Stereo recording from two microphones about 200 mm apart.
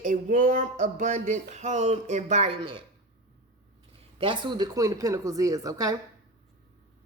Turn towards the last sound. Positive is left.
turn(degrees=-15)  # may be behind; listen again after turning